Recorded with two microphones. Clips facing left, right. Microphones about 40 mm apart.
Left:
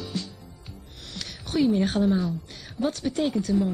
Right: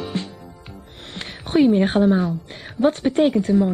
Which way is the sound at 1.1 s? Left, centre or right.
Right.